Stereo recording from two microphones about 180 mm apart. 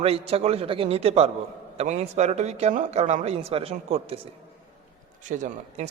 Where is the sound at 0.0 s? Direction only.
35° right (ahead or behind).